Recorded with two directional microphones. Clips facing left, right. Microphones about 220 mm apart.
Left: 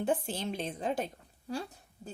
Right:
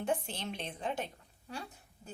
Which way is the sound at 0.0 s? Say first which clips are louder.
Left 4 dB; 35° left (ahead or behind).